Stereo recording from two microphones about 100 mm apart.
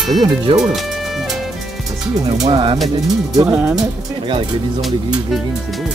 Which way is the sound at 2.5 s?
60° right (ahead or behind).